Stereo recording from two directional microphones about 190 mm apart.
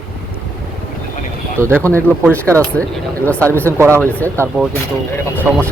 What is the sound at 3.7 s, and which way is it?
Speech, 15° right (ahead or behind).